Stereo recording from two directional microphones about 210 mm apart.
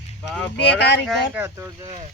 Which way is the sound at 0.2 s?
5° left (ahead or behind).